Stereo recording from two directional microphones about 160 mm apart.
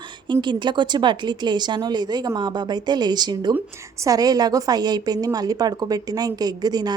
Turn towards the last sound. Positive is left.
turn(degrees=-25)  # may be behind; listen again after turning